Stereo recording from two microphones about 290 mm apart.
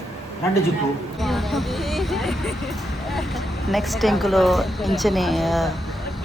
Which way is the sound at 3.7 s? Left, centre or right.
Centre.